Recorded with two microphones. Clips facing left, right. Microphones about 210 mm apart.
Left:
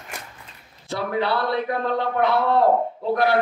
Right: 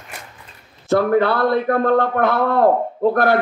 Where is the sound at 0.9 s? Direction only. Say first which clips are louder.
Right 8 dB; 50° right (ahead or behind).